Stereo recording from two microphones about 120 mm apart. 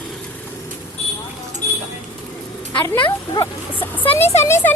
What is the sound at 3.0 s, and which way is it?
Speech, 40° left (ahead or behind).